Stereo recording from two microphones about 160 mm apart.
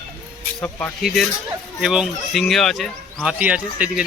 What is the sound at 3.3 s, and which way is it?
Speech, 10° right (ahead or behind).